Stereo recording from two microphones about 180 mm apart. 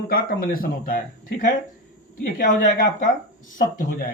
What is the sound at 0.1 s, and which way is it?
A man's voice, 55° left (ahead or behind).